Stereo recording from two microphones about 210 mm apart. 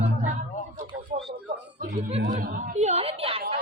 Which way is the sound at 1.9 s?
35° right (ahead or behind).